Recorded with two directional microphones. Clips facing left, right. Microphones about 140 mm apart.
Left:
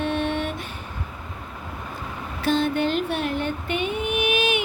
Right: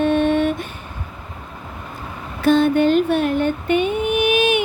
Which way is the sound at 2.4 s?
50° right (ahead or behind).